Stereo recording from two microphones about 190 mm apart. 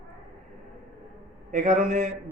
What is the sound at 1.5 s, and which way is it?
Speech, 40° right (ahead or behind).